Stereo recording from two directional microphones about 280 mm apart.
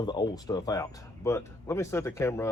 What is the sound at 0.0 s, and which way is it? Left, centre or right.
Speech, centre.